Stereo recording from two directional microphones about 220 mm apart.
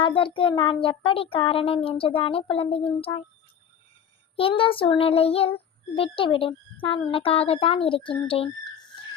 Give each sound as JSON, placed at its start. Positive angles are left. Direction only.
{"t": 0.0, "sound": "child singing", "side_deg": 25}
{"t": 4.4, "sound": "child singing", "side_deg": 25}
{"t": 8.3, "sound": "a sound", "side_deg": 25}